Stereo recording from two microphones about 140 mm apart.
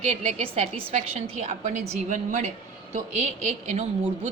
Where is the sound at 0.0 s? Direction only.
50° right (ahead or behind).